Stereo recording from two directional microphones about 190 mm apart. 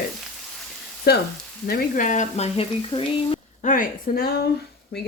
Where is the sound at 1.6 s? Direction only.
45° left (ahead or behind); by 3.4 s 25° left (ahead or behind).